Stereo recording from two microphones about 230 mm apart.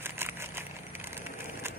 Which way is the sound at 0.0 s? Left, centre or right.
Centre.